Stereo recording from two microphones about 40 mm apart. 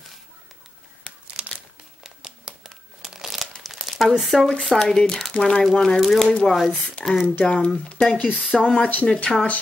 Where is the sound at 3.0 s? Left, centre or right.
Centre.